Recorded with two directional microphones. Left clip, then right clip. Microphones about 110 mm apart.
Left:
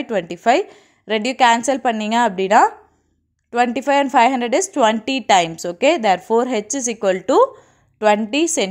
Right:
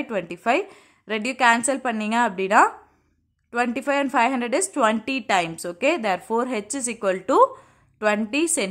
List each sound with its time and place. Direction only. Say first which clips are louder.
0.0 s a woman's voice: left 7 dB; 25° left (ahead or behind)